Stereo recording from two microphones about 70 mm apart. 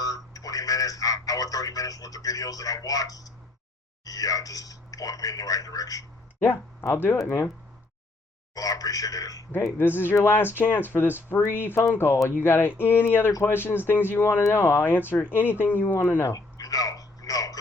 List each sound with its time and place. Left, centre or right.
0.0 s speech: left
6.4 s speech: left
8.5 s speech: left
9.7 s speech: left
16.3 s a sound: left